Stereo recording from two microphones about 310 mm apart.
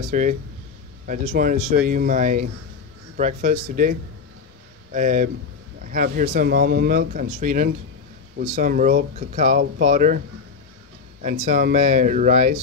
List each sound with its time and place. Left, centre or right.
0.1 s speech: right
4.9 s speech: right
11.2 s speech: right